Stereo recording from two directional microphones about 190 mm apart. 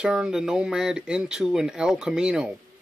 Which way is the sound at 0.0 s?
5° right (ahead or behind).